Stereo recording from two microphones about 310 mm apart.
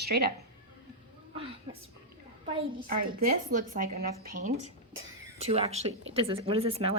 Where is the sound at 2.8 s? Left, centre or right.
Right.